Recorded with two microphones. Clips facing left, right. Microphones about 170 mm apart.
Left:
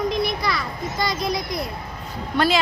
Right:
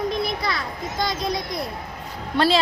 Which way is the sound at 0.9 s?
25° right (ahead or behind).